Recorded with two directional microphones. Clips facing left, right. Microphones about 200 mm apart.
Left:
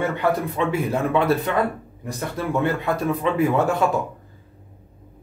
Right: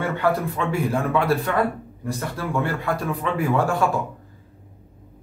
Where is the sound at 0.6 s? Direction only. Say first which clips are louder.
Left 1 dB; 20° left (ahead or behind).